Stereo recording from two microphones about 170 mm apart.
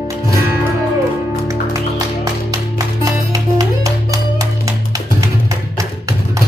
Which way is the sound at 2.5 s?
20° right (ahead or behind).